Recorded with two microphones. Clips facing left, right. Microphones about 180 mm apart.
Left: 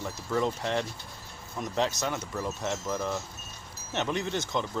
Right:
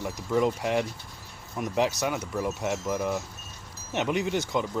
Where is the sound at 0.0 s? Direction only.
15° right (ahead or behind).